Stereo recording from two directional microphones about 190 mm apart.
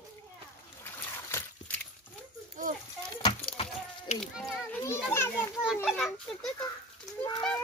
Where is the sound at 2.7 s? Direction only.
40° right (ahead or behind).